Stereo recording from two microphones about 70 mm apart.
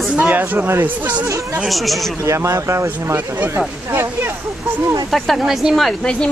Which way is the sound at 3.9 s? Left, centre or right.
Right.